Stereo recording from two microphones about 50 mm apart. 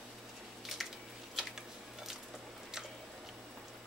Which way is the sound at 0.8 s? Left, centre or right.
Centre.